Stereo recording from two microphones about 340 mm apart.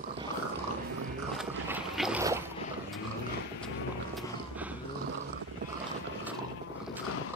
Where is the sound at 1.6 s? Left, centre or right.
Centre.